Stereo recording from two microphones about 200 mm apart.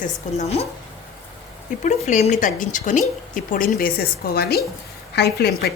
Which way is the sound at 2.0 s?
35° left (ahead or behind).